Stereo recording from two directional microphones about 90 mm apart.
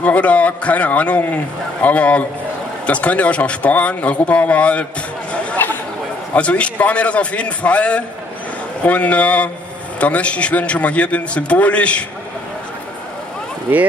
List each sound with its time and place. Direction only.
0.0 s a man's voice: 15° left (ahead or behind)
5.3 s chatter: 15° left (ahead or behind)
6.3 s a man's voice: 15° left (ahead or behind)